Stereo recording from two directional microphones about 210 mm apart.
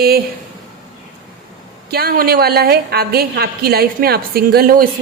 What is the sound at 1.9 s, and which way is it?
A woman's voice, 45° right (ahead or behind).